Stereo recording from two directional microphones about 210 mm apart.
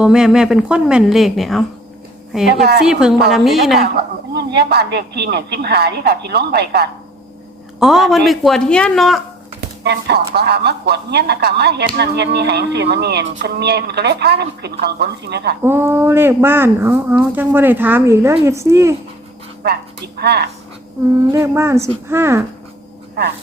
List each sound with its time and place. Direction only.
0.0 s a woman's voice: 5° right (ahead or behind)
2.8 s a woman's voice: 5° right (ahead or behind)
4.4 s a woman's voice: 50° right (ahead or behind)
7.8 s a woman's voice: centre (ahead or behind)
9.8 s a woman's voice: 50° right (ahead or behind)
15.6 s speech: 10° right (ahead or behind)
19.6 s a woman's voice: 50° right (ahead or behind)
21.3 s speech: 10° right (ahead or behind)